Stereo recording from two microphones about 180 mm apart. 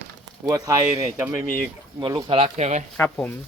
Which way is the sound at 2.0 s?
25° right (ahead or behind).